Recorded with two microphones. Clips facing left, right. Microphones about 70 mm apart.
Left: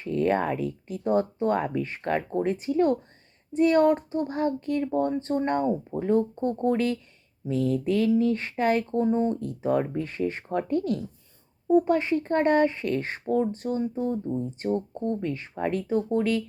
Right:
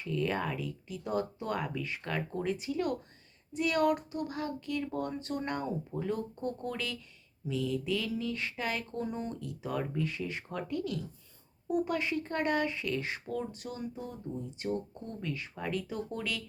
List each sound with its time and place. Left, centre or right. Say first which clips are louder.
0.0 s speech: left 8 dB; left
4.9 s speech: left 10 dB; left
9.0 s speech: left 12 dB; left